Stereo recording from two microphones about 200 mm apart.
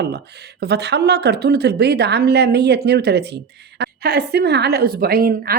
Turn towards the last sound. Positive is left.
turn(degrees=-45)  # may be behind; listen again after turning